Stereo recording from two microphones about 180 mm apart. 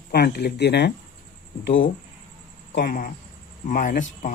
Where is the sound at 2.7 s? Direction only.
50° left (ahead or behind).